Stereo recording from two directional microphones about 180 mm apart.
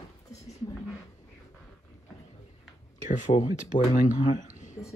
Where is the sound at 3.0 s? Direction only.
40° left (ahead or behind).